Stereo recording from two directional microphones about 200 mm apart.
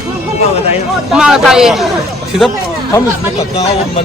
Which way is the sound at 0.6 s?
30° left (ahead or behind).